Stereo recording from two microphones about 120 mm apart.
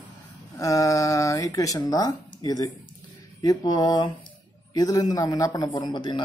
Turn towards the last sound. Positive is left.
turn(degrees=40)  # may be behind; listen again after turning